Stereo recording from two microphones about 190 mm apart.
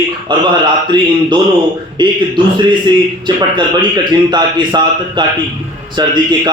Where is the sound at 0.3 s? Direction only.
25° right (ahead or behind).